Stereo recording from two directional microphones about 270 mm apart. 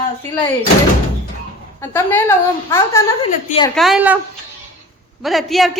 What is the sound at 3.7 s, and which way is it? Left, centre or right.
Speech, centre.